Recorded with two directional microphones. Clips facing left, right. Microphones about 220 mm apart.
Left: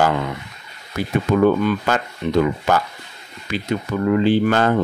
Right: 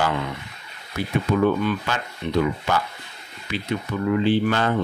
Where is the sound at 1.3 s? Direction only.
45° left (ahead or behind).